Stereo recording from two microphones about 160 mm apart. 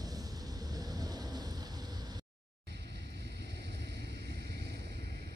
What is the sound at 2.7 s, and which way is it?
Vehicle, 90° right.